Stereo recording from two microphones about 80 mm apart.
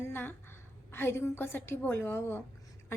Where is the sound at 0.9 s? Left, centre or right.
Left.